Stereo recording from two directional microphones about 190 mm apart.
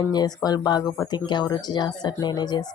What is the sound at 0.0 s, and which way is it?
Speech, 20° left (ahead or behind).